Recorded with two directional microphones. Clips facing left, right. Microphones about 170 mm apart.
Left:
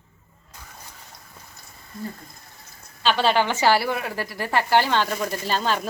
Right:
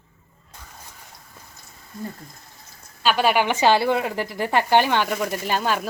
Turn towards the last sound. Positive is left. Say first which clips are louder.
# right 1 dB
turn(degrees=-10)  # may be behind; listen again after turning